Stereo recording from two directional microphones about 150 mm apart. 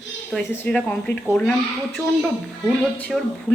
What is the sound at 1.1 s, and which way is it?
Speech, 90° left.